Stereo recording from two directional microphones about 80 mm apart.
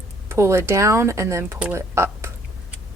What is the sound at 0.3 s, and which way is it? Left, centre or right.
Speech, right.